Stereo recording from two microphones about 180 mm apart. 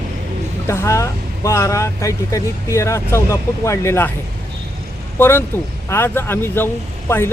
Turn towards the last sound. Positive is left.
turn(degrees=15)  # may be behind; listen again after turning